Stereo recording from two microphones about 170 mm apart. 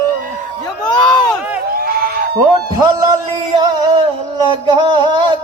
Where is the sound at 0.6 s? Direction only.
25° left (ahead or behind).